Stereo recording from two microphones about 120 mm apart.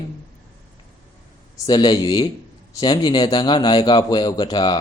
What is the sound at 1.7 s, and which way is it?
A man's voice, 35° left (ahead or behind).